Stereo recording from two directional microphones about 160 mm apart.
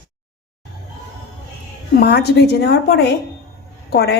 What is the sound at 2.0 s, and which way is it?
A woman's voice, 90° left.